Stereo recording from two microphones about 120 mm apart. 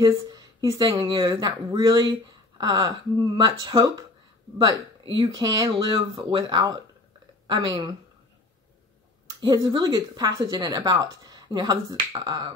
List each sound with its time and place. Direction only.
0.0 s speech: 30° right (ahead or behind)
9.4 s speech: 35° right (ahead or behind)